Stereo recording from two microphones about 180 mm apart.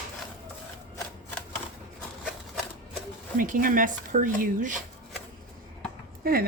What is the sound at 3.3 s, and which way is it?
Speech, 50° right (ahead or behind).